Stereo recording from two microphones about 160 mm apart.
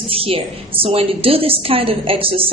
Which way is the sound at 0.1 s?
35° right (ahead or behind).